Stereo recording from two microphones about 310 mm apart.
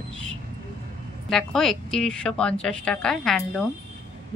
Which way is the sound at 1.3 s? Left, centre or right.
Centre.